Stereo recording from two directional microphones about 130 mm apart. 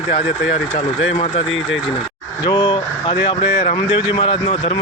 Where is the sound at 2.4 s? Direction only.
35° left (ahead or behind).